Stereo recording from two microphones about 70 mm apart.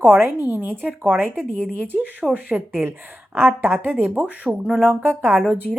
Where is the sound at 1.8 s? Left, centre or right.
Right.